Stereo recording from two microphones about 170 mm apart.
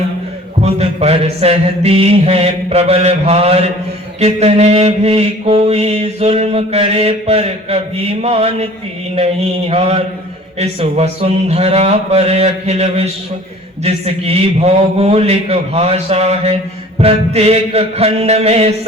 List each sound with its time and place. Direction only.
0.6 s mantra: 35° right (ahead or behind)